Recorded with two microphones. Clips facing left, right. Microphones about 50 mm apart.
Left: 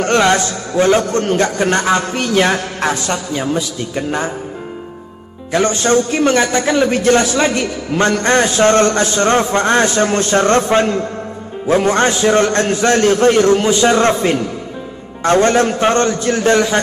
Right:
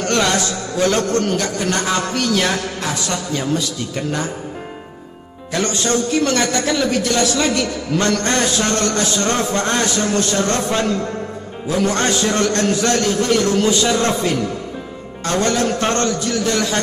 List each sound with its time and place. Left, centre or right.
0.0 s a man's voice: left
3.3 s a man's voice: centre
5.5 s a man's voice: left